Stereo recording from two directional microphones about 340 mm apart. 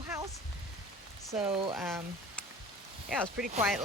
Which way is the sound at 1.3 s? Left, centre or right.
Centre.